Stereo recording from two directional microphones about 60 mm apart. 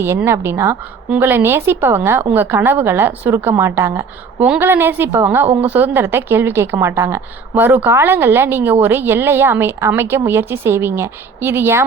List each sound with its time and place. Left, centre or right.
0.3 s a woman's voice: right
4.6 s a woman's voice: right
7.5 s a woman's voice: right